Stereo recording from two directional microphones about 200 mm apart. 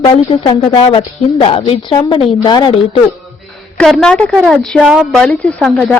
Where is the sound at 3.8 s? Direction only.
5° left (ahead or behind).